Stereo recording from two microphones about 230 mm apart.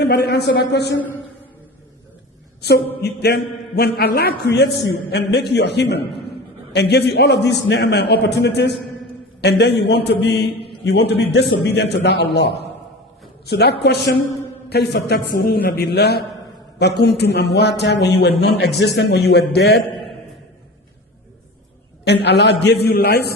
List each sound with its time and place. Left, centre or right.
0.0 s a man's voice: left
0.9 s a man's voice: centre
2.6 s a woman's voice: left
22.0 s a man's voice: left